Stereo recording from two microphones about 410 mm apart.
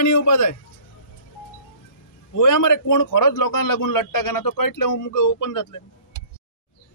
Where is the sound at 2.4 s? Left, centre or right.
Left.